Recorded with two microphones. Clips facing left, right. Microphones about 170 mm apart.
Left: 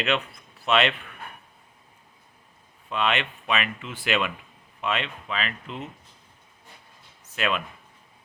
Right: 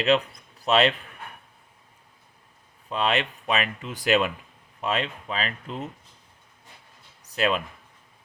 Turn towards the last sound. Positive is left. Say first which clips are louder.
# right 3 dB
turn(degrees=-35)  # may be behind; listen again after turning